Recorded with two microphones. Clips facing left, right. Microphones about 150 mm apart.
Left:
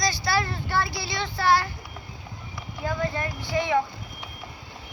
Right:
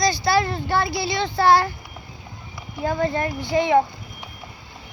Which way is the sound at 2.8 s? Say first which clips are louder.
Right 6 dB; 35° right (ahead or behind).